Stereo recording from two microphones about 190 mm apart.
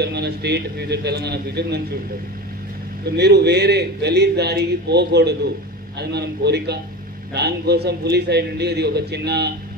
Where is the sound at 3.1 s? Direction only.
60° right (ahead or behind).